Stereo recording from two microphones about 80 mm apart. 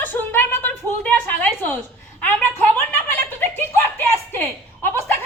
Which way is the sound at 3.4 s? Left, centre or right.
Left.